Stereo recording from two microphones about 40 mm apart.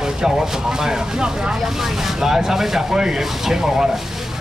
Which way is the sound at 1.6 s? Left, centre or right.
Centre.